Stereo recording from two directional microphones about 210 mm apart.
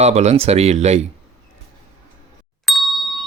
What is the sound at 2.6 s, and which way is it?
Ding, centre (ahead or behind).